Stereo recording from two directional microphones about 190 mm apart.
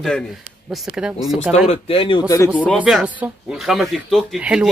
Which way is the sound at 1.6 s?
30° left (ahead or behind).